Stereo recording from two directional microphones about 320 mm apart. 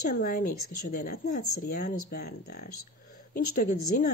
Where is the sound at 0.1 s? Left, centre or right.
Left.